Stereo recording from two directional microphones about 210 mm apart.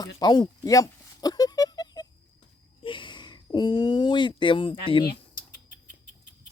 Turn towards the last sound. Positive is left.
turn(degrees=40)  # may be behind; listen again after turning